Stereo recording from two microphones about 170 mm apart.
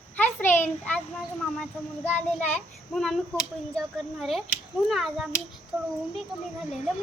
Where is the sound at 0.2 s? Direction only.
10° left (ahead or behind).